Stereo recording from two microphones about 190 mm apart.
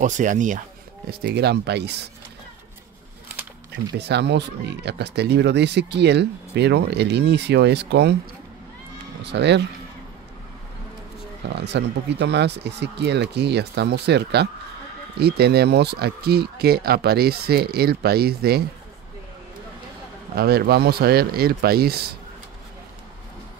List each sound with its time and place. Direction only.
0.0 s speech: 40° right (ahead or behind)
1.2 s speech: 60° right (ahead or behind)
3.9 s speech: 60° right (ahead or behind)
9.2 s speech: 65° right (ahead or behind)
11.4 s speech: 65° right (ahead or behind)
20.3 s speech: 55° right (ahead or behind)